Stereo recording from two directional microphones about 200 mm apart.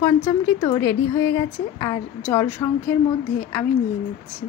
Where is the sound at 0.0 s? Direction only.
15° left (ahead or behind).